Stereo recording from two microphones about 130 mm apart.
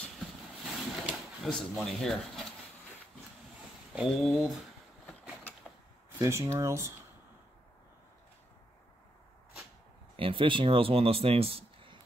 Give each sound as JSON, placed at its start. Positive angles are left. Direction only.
{"t": 0.7, "sound": "a sound", "side_deg": -5}
{"t": 1.5, "sound": "speech", "side_deg": 5}
{"t": 3.9, "sound": "speech", "side_deg": -5}
{"t": 6.0, "sound": "speech", "side_deg": -20}
{"t": 10.1, "sound": "speech", "side_deg": -40}